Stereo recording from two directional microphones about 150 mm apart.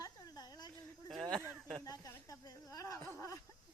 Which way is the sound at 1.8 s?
20° left (ahead or behind).